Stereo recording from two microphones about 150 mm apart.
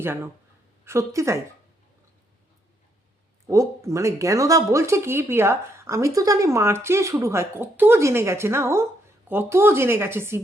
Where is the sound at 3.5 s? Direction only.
20° right (ahead or behind).